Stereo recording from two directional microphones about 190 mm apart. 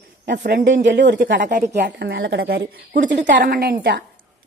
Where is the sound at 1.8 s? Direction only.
60° right (ahead or behind).